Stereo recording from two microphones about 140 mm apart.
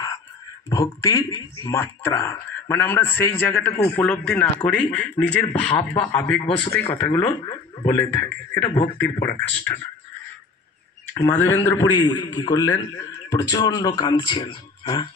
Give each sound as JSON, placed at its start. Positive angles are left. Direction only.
{"t": 0.7, "sound": "speech", "side_deg": 25}
{"t": 7.0, "sound": "speech", "side_deg": 25}
{"t": 8.6, "sound": "speech", "side_deg": 35}
{"t": 8.9, "sound": "speech", "side_deg": 15}
{"t": 11.1, "sound": "a man's voice", "side_deg": 15}